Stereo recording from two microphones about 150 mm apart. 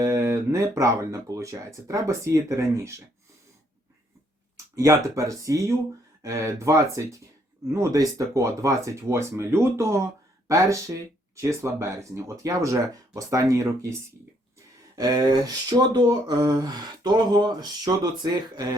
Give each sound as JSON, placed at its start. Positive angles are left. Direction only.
{"t": 0.0, "sound": "speech", "side_deg": -20}
{"t": 4.5, "sound": "speech", "side_deg": -20}
{"t": 14.9, "sound": "speech", "side_deg": -25}